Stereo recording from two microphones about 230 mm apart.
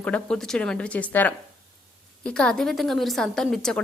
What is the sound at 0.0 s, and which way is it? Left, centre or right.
A woman's voice, centre.